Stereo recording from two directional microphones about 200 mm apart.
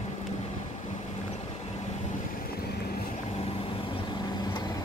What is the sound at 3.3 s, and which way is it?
Vehicle, 30° left (ahead or behind).